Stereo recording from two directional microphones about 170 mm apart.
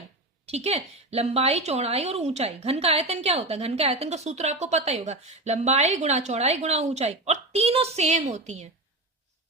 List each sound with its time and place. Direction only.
0.4 s a woman's voice: 35° right (ahead or behind)